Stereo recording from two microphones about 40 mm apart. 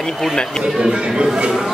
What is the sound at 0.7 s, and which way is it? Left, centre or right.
Speech, centre.